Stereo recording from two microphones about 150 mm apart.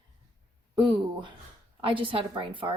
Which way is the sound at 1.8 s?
35° right (ahead or behind).